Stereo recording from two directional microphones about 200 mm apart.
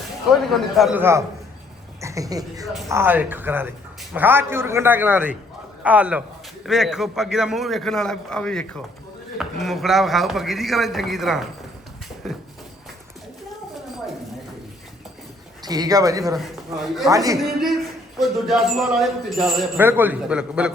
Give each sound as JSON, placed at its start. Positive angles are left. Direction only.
{"t": 0.3, "sound": "a man's voice", "side_deg": 0}
{"t": 15.6, "sound": "speech", "side_deg": -20}
{"t": 16.8, "sound": "a man's voice", "side_deg": 0}
{"t": 17.1, "sound": "a man's voice", "side_deg": -15}
{"t": 18.2, "sound": "a man's voice", "side_deg": 0}